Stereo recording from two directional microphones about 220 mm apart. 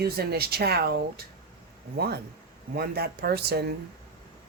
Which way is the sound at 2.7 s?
45° right (ahead or behind).